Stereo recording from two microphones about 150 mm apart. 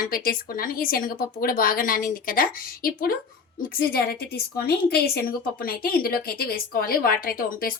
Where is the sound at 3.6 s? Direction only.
85° left.